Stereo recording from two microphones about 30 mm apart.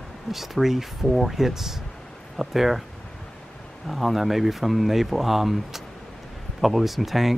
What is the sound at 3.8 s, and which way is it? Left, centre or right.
Speech, centre.